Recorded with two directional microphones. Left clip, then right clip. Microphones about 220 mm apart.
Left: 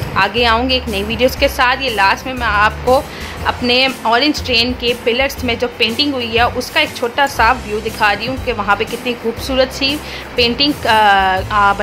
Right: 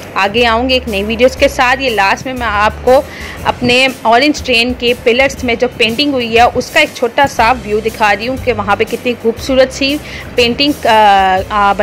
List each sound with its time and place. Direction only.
0.1 s a woman's voice: 20° right (ahead or behind)